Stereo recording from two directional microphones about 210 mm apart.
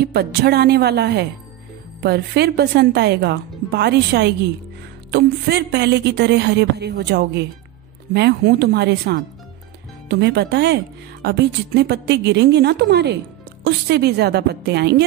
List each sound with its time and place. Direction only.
0.0 s speech: 50° right (ahead or behind)